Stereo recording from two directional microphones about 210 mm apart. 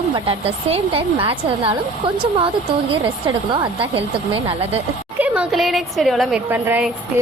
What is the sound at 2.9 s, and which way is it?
A woman's voice, 25° right (ahead or behind).